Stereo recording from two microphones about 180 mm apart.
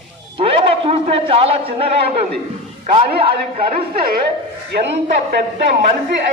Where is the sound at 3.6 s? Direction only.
50° right (ahead or behind).